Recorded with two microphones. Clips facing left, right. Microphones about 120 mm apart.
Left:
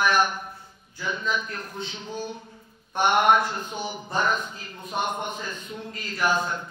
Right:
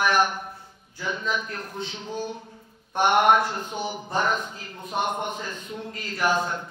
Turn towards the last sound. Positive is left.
turn(degrees=-45)  # may be behind; listen again after turning